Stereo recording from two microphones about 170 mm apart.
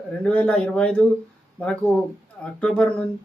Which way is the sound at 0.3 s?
5° left (ahead or behind).